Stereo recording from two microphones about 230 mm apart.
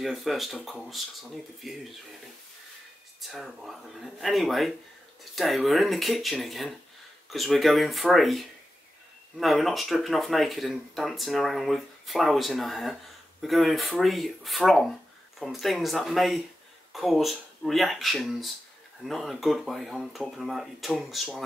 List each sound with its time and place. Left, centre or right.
0.0 s speech: centre
3.2 s speech: centre